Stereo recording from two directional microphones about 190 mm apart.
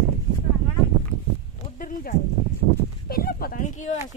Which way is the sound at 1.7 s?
45° left (ahead or behind).